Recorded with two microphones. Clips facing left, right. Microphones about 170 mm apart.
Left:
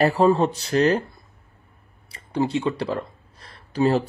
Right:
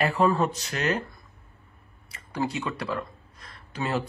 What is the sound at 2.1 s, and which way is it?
Speech, 25° left (ahead or behind).